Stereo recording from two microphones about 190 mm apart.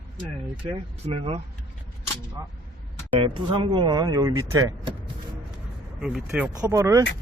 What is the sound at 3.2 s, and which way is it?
Speech, 30° right (ahead or behind).